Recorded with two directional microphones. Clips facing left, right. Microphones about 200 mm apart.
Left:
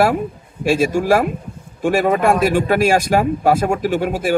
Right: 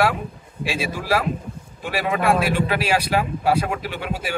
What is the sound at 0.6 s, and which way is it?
Speech, 45° left (ahead or behind).